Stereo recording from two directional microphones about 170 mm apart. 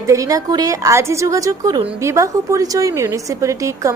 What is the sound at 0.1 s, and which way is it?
Speech, 20° right (ahead or behind).